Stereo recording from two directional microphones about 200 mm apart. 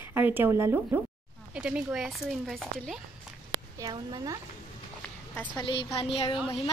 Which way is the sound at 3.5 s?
15° right (ahead or behind).